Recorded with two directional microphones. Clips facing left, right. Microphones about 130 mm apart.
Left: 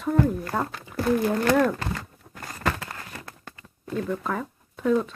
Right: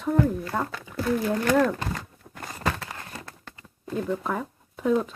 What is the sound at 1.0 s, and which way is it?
Speech, 55° left (ahead or behind).